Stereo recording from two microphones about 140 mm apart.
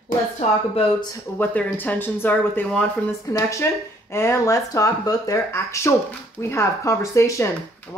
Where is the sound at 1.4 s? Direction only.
10° left (ahead or behind).